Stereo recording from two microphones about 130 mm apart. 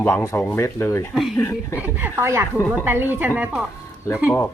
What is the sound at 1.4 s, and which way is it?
Speech, 20° left (ahead or behind).